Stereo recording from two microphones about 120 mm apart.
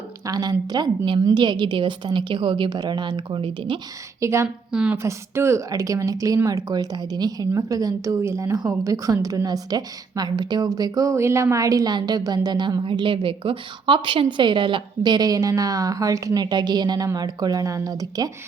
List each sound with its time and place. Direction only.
0.3 s speech: 35° right (ahead or behind)
4.2 s a woman's voice: 25° right (ahead or behind)
4.4 s a woman's voice: 5° right (ahead or behind)
5.0 s speech: 20° right (ahead or behind)